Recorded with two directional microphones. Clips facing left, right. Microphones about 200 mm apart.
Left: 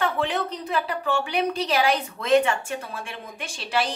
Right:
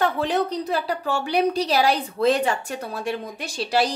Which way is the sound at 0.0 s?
40° right (ahead or behind).